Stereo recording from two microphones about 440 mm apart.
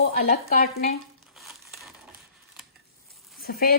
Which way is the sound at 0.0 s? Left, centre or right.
Centre.